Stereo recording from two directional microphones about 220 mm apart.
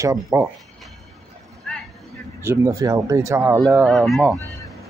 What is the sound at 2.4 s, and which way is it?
Speech, 10° right (ahead or behind).